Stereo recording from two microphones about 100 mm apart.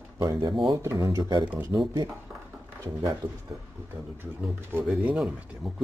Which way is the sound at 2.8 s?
30° right (ahead or behind).